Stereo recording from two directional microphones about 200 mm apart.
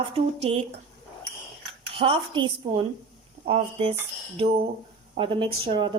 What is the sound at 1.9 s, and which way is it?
A woman's voice, 25° right (ahead or behind).